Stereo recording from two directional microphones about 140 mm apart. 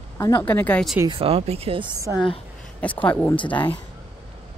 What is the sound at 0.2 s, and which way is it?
Speech, 15° left (ahead or behind).